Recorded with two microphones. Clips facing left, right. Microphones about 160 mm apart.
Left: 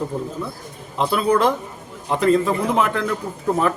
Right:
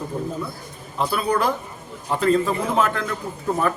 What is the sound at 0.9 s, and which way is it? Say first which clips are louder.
Speech: left 4 dB; 20° left (ahead or behind).